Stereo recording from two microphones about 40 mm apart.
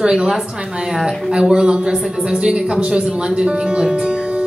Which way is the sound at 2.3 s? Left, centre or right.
Right.